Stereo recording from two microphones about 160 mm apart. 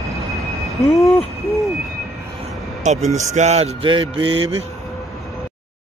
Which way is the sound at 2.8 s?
45° right (ahead or behind).